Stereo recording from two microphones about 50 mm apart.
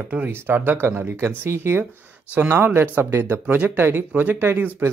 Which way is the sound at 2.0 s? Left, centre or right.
Right.